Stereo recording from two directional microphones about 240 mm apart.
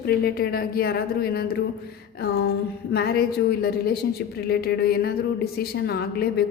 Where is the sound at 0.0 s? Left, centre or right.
Left.